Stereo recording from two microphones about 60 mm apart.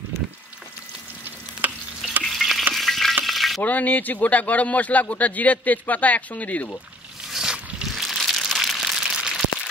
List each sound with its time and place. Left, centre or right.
1.6 s stir: right
2.2 s stir: centre
2.7 s frying: centre
3.6 s a man's voice: left
7.2 s a sound: centre
7.8 s crumpling: centre